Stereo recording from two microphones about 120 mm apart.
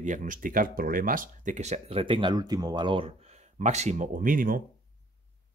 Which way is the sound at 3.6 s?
75° right (ahead or behind).